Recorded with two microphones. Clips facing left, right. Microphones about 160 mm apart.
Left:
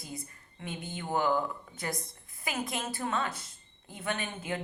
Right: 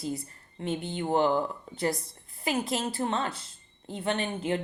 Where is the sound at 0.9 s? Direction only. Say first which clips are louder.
Right 4 dB; 30° right (ahead or behind).